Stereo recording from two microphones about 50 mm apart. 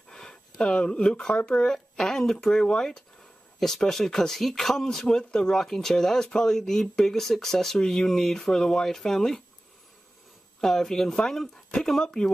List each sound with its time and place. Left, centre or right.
0.1 s speech: centre
10.6 s speech: centre